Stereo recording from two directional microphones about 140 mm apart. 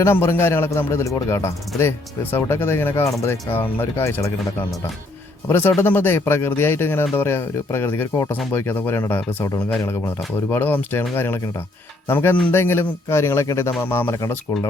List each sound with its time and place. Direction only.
0.0 s speech: 15° left (ahead or behind)
5.5 s speech: 15° left (ahead or behind)